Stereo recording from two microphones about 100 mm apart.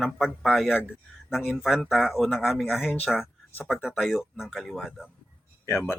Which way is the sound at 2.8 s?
15° left (ahead or behind).